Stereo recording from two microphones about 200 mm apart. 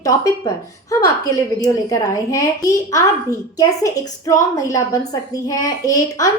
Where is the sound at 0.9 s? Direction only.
15° left (ahead or behind).